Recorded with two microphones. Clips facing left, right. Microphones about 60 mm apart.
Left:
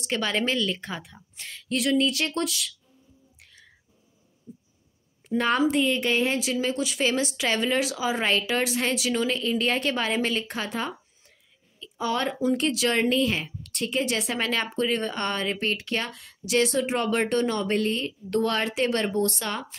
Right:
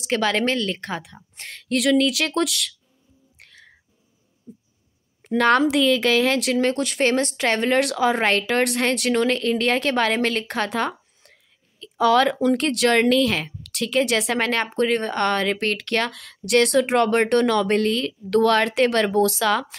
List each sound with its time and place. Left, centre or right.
0.0 s speech: right
0.6 s speech: right
1.3 s speech: right
3.3 s a sound: right
5.2 s speech: right
11.8 s speech: right